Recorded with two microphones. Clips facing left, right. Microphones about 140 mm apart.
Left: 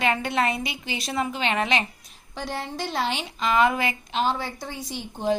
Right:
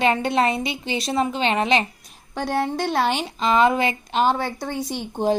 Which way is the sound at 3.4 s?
30° right (ahead or behind).